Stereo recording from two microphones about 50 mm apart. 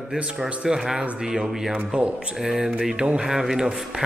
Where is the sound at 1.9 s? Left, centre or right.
Right.